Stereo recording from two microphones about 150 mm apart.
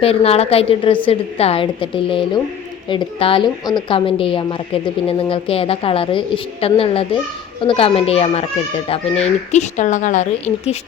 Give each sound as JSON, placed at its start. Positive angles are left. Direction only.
{"t": 0.0, "sound": "a woman's voice", "side_deg": 40}